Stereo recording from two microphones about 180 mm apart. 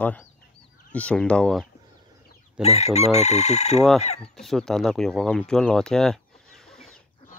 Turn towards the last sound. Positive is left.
turn(degrees=0)  # may be behind; listen again after turning